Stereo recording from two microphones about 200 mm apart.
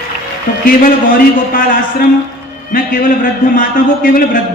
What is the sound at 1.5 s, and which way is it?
Speech, 45° left (ahead or behind).